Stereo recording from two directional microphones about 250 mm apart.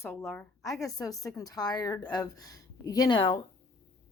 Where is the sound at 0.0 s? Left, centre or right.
Centre.